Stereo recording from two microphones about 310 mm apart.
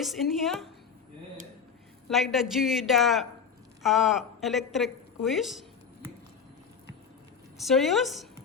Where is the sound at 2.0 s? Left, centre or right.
Centre.